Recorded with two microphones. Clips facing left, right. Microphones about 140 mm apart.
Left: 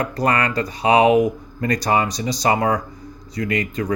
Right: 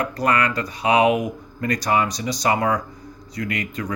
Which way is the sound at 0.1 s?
35° left (ahead or behind).